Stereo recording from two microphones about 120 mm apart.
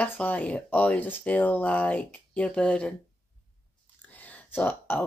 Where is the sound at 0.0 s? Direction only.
15° left (ahead or behind).